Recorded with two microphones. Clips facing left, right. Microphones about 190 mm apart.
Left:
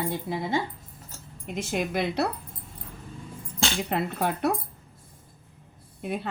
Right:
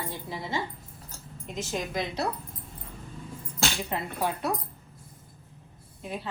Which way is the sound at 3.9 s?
65° left (ahead or behind).